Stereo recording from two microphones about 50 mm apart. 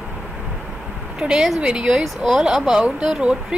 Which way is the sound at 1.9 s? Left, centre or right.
Centre.